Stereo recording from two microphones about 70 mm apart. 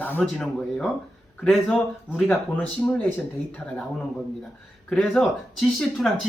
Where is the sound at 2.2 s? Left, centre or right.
Centre.